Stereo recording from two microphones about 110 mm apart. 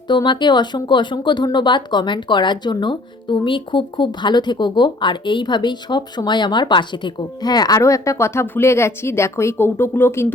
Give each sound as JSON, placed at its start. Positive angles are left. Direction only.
{"t": 0.1, "sound": "speech", "side_deg": 45}